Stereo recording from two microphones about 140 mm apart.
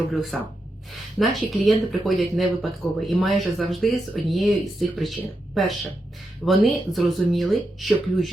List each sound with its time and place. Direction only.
0.1 s speech: centre (ahead or behind)